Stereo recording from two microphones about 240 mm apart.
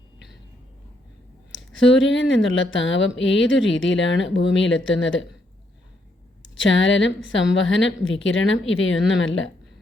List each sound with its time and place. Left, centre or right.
1.5 s a woman's voice: left
6.6 s a woman's voice: left